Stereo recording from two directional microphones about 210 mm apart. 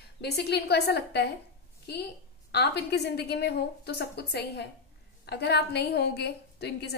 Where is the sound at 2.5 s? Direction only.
50° left (ahead or behind).